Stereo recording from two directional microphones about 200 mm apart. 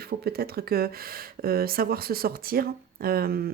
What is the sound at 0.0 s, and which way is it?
A woman's voice, 50° right (ahead or behind).